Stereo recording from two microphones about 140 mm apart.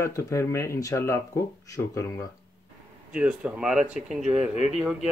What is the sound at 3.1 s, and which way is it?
Speech, 10° right (ahead or behind).